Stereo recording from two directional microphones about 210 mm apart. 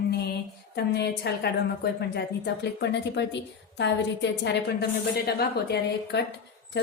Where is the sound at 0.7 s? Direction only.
50° left (ahead or behind).